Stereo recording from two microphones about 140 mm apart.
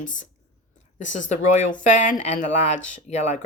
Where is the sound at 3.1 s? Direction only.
55° left (ahead or behind).